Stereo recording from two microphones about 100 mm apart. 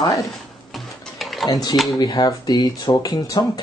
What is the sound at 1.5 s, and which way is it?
Speech, 40° left (ahead or behind).